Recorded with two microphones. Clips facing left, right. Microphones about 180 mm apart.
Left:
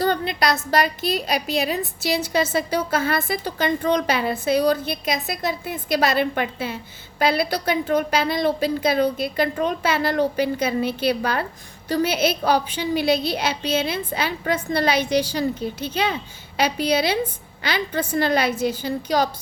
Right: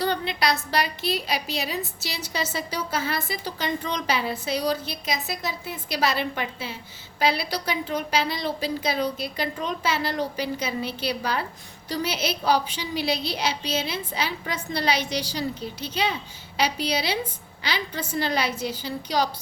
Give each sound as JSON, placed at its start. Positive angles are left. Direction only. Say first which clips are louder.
{"t": 0.0, "sound": "a woman's voice", "louder": "left 4 dB", "side_deg": 45}